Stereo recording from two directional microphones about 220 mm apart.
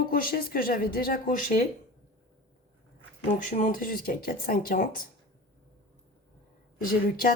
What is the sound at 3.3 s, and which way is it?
Speech, 35° left (ahead or behind).